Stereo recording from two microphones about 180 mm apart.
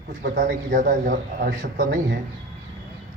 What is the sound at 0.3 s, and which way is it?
A man's voice, 50° right (ahead or behind).